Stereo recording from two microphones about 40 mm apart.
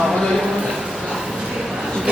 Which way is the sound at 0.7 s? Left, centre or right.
Centre.